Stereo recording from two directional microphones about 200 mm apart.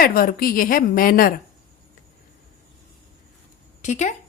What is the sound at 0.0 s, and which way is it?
A woman's voice, 45° left (ahead or behind).